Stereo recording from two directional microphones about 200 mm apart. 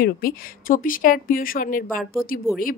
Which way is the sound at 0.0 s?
45° left (ahead or behind).